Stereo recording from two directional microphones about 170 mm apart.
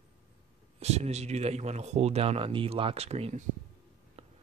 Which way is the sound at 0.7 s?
40° right (ahead or behind).